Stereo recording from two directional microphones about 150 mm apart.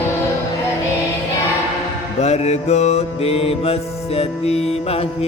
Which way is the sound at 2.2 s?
45° left (ahead or behind).